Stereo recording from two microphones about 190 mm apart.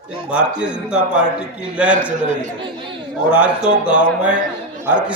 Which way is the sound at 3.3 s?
5° right (ahead or behind).